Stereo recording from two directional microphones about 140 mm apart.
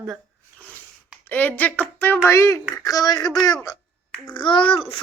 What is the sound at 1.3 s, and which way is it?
Speech, 10° left (ahead or behind).